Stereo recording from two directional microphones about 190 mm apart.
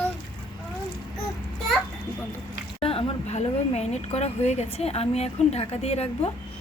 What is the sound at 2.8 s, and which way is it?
A woman's voice, 30° left (ahead or behind).